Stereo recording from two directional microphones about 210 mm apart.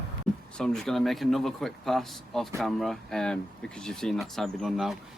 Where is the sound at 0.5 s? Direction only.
5° left (ahead or behind).